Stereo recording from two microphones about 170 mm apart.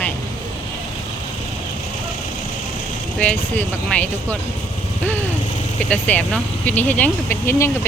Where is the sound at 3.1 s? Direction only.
5° left (ahead or behind).